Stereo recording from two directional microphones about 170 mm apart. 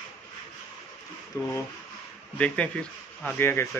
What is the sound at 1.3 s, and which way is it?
Speech, 20° left (ahead or behind).